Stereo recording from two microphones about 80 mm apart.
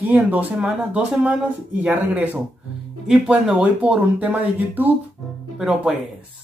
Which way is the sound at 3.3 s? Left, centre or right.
Centre.